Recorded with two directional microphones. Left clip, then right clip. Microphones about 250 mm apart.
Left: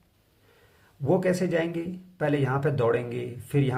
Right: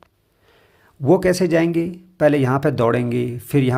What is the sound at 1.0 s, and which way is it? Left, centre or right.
Speech, right.